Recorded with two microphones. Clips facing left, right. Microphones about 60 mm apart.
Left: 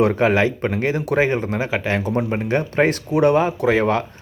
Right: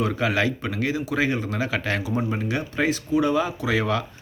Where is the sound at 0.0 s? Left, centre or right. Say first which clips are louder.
Left 7 dB; left.